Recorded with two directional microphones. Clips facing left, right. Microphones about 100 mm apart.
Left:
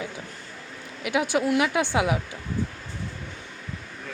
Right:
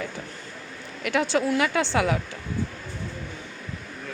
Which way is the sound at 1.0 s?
10° left (ahead or behind).